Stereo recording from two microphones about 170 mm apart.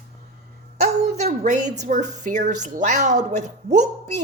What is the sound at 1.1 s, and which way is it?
Speech, 45° right (ahead or behind).